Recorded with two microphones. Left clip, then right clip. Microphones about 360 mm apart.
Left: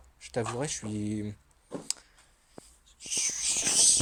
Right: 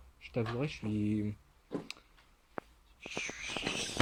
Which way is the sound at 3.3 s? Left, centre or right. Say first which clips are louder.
Left 10 dB; centre.